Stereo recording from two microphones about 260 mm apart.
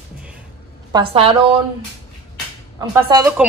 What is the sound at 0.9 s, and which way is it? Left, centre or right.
Speech, centre.